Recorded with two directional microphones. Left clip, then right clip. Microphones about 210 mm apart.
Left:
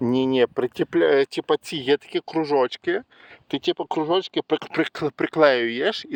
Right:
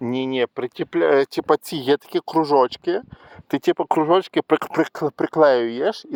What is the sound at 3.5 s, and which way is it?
Speech, 25° right (ahead or behind).